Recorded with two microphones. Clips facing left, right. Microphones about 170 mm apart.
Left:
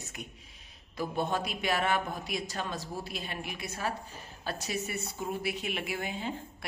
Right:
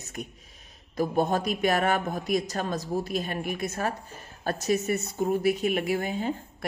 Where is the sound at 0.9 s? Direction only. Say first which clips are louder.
Right 7 dB; 45° right (ahead or behind).